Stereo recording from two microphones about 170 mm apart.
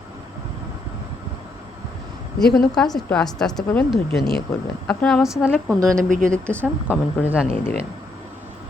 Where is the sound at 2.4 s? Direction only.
Centre (ahead or behind).